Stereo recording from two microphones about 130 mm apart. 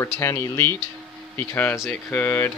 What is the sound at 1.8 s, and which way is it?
Speech, centre (ahead or behind).